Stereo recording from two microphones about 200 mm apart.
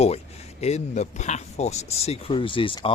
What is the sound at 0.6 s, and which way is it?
Speech, 35° left (ahead or behind).